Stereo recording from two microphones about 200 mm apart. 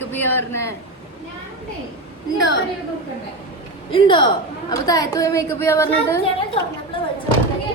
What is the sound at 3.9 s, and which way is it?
A man's voice, 25° left (ahead or behind).